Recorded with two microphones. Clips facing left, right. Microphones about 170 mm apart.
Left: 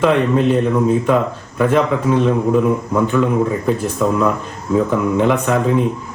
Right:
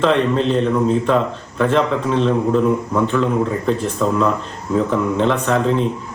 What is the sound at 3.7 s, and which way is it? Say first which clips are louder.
Speech: right 1 dB; 10° left (ahead or behind).